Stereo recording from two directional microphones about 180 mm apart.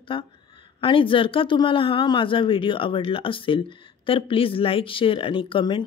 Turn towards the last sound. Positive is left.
turn(degrees=30)  # may be behind; listen again after turning